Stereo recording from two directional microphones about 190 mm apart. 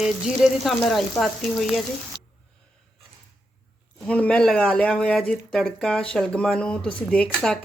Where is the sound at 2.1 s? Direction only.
25° right (ahead or behind).